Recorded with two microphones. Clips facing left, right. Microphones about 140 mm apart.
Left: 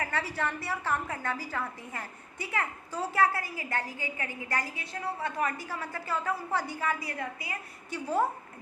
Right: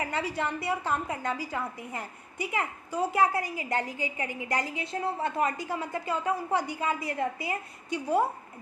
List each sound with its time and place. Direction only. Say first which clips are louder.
0.0 s a woman's voice: right 2 dB; 15° right (ahead or behind)